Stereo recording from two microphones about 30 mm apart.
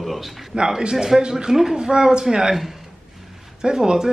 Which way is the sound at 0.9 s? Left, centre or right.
Centre.